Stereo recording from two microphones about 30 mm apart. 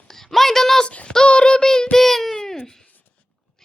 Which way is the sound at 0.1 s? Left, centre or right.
Centre.